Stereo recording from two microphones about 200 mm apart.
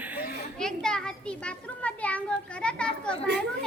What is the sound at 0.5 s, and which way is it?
Children playing, 5° left (ahead or behind).